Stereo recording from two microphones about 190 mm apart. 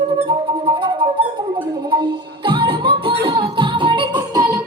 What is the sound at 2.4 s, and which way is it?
Music, 25° right (ahead or behind).